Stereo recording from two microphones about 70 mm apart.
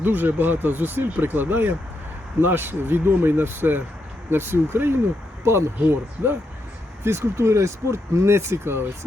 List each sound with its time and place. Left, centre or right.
0.0 s speech: right